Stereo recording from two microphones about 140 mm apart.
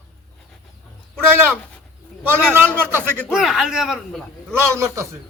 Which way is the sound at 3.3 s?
Centre (ahead or behind).